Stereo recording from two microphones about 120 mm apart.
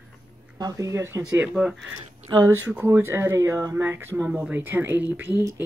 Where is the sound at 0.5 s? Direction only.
30° right (ahead or behind).